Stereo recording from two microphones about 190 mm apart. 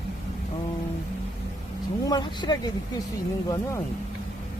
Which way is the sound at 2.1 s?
20° left (ahead or behind).